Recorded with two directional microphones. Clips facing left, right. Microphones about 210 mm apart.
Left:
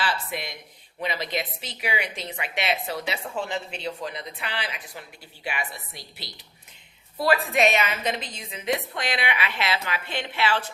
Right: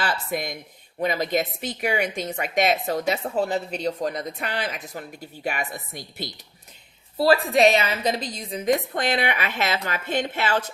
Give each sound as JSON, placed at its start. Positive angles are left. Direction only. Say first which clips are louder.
{"t": 0.0, "sound": "speech", "louder": "right 3 dB", "side_deg": -45}
{"t": 7.2, "sound": "speech", "louder": "right 4 dB", "side_deg": -35}